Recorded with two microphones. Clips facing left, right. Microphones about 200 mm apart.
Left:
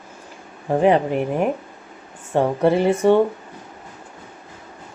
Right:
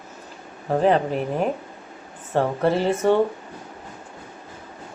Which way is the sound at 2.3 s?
15° left (ahead or behind).